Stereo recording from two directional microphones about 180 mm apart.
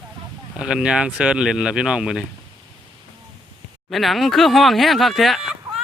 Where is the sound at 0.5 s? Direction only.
5° right (ahead or behind).